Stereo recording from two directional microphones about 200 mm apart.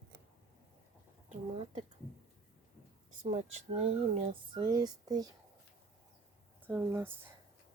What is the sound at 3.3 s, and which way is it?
Speech, 35° right (ahead or behind).